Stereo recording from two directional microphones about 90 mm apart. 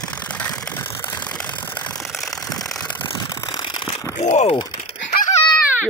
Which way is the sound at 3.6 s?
65° left (ahead or behind).